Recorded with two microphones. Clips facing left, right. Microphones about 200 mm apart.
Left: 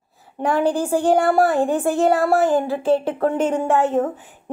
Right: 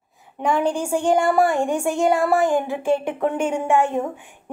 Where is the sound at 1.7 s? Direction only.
15° right (ahead or behind).